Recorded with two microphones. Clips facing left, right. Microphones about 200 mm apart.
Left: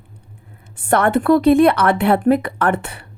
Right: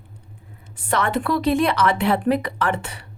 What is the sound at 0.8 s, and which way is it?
Speech, 55° left (ahead or behind).